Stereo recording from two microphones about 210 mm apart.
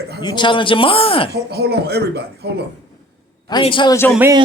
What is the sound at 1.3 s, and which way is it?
Speech, 50° right (ahead or behind).